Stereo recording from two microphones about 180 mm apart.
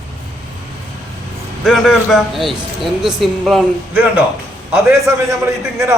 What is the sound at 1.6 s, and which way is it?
A man's voice, centre (ahead or behind).